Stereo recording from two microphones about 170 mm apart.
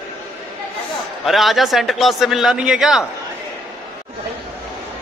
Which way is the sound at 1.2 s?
Centre (ahead or behind).